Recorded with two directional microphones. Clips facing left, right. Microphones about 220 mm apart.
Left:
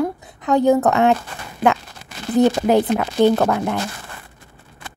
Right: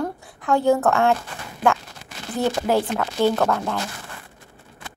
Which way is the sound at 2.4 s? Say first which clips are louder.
Left 6 dB; 20° left (ahead or behind).